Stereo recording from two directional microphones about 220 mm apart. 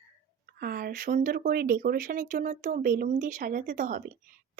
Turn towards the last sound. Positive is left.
turn(degrees=-40)  # may be behind; listen again after turning